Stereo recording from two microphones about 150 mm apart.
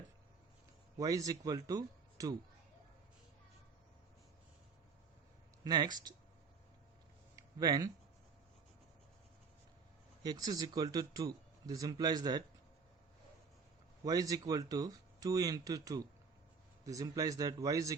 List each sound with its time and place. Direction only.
0.9 s speech: 25° right (ahead or behind)
5.6 s speech: 30° right (ahead or behind)
7.3 s a sound: 25° right (ahead or behind)
10.2 s speech: 25° right (ahead or behind)
14.0 s speech: 25° right (ahead or behind)